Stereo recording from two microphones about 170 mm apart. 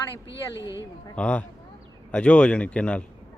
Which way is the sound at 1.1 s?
5° left (ahead or behind).